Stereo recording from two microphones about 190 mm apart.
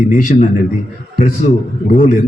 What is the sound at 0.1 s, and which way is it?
A man's voice, 45° left (ahead or behind).